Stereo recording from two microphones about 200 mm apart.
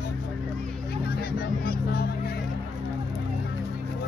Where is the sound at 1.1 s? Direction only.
50° left (ahead or behind).